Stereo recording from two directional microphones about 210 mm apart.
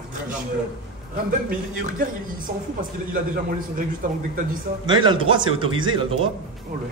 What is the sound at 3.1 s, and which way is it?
A man's voice, 40° right (ahead or behind).